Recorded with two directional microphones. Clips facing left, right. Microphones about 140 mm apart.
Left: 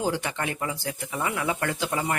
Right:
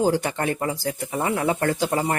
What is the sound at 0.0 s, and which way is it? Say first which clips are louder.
Speech: right 6 dB; 40° right (ahead or behind).